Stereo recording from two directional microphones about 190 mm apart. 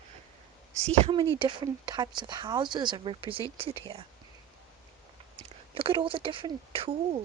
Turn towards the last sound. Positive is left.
turn(degrees=-30)  # may be behind; listen again after turning